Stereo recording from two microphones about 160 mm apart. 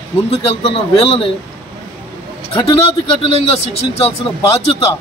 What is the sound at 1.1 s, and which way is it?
Speech, 35° left (ahead or behind).